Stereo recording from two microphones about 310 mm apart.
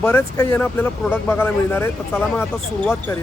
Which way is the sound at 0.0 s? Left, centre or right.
Centre.